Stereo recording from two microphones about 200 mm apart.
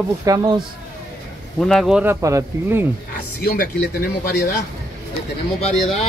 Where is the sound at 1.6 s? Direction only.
Centre (ahead or behind); by 2.8 s 15° right (ahead or behind).